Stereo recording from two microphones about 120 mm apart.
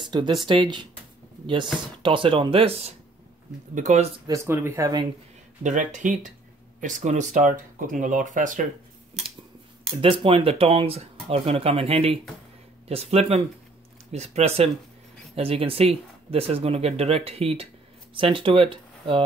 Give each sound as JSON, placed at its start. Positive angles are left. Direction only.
{"t": 0.0, "sound": "a sound", "side_deg": -40}
{"t": 0.4, "sound": "speech", "side_deg": -40}
{"t": 3.7, "sound": "speech", "side_deg": -80}
{"t": 4.3, "sound": "speech", "side_deg": -25}
{"t": 5.6, "sound": "speech", "side_deg": -90}
{"t": 9.8, "sound": "speech", "side_deg": -50}